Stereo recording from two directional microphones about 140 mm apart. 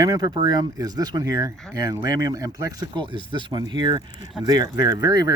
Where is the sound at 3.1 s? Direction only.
35° right (ahead or behind).